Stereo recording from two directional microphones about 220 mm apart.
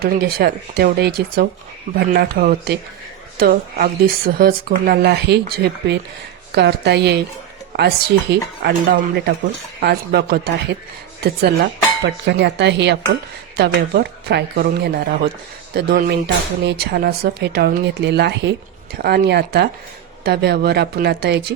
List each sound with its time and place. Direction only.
0.0 s speech: 45° right (ahead or behind)
9.8 s speech: 45° right (ahead or behind)